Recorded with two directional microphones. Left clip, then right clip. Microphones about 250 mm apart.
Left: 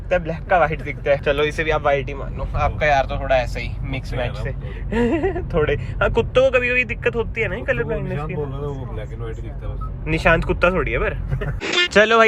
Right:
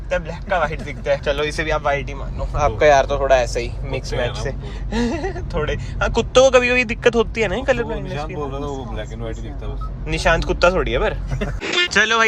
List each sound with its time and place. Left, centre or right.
0.1 s speech: centre
6.1 s speech: right
10.1 s speech: centre
11.6 s speech: centre